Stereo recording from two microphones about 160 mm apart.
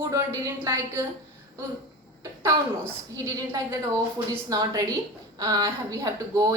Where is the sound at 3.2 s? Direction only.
20° right (ahead or behind).